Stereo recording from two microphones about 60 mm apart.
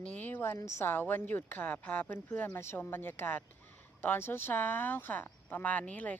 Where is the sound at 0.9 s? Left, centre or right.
Left.